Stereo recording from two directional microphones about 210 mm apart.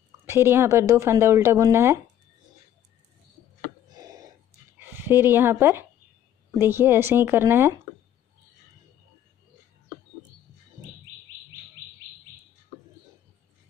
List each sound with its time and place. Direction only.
0.2 s speech: 10° right (ahead or behind)
3.9 s a sound: 15° right (ahead or behind)
4.7 s speech: 10° right (ahead or behind)